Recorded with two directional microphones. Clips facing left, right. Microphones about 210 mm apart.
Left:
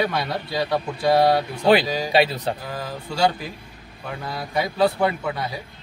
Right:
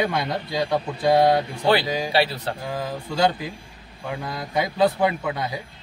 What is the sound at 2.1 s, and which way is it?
Speech, 20° left (ahead or behind).